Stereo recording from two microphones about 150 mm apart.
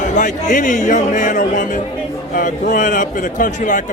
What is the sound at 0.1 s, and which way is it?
A man's voice, 55° left (ahead or behind).